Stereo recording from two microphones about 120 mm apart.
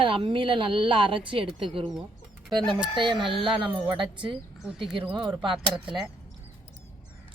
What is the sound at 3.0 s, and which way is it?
Speech, 40° right (ahead or behind).